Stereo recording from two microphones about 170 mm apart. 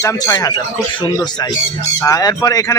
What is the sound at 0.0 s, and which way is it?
Speech, 15° left (ahead or behind).